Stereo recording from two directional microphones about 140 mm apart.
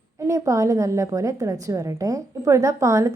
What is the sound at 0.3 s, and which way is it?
A woman's voice, 20° right (ahead or behind).